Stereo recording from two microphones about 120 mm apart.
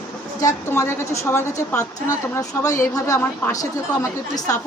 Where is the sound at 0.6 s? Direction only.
20° left (ahead or behind).